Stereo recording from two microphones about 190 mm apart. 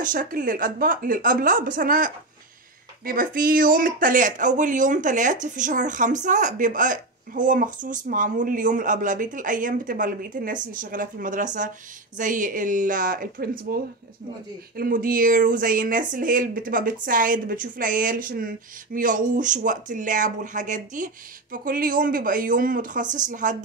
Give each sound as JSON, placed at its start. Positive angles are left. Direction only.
{"t": 0.0, "sound": "speech", "side_deg": -45}
{"t": 14.8, "sound": "speech", "side_deg": -45}